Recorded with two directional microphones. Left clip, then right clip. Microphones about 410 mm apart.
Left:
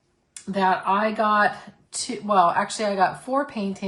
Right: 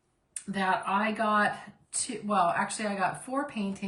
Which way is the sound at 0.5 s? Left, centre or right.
Centre.